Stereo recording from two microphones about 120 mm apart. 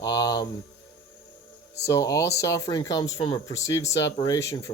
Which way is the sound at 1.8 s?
25° left (ahead or behind).